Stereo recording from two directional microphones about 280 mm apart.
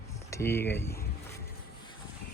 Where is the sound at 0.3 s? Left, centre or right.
Centre.